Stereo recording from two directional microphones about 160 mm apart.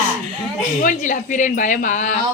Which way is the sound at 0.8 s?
55° left (ahead or behind).